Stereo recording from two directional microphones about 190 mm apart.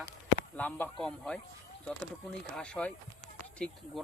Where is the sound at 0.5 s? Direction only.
10° left (ahead or behind).